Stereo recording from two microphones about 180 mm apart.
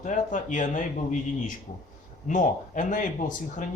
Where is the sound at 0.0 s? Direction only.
45° left (ahead or behind).